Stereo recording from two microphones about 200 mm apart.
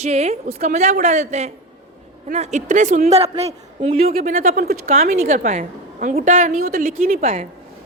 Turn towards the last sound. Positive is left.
turn(degrees=-45)  # may be behind; listen again after turning